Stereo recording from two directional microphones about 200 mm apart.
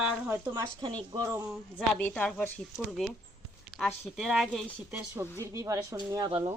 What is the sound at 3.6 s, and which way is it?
Speech, centre (ahead or behind).